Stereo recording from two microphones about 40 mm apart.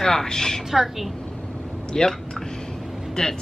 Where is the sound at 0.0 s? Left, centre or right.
Centre.